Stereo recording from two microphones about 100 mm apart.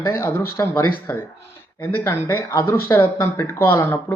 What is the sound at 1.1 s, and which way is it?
Speech, 15° left (ahead or behind).